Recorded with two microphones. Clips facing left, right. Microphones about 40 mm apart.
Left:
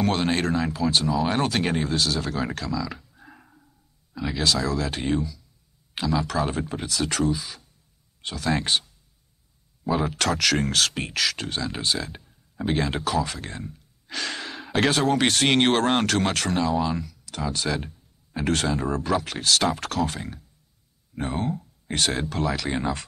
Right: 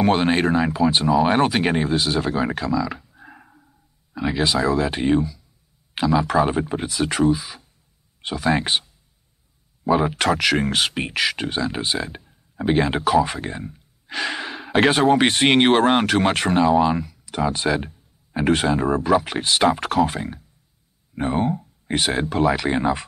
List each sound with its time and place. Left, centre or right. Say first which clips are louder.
0.0 s speech: right 5 dB; centre
9.8 s speech: right 5 dB; centre